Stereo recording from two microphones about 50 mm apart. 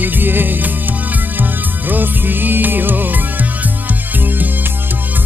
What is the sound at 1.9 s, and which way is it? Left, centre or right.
Music, right.